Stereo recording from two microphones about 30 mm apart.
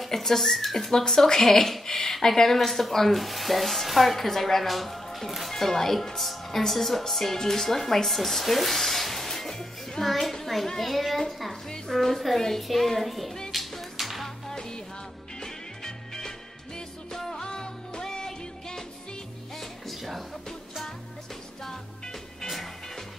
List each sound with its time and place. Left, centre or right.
0.2 s speech: centre
5.5 s speech: centre
9.5 s music: centre
10.3 s a child's voice: centre
13.5 s music: centre
14.5 s music: left
19.9 s music: centre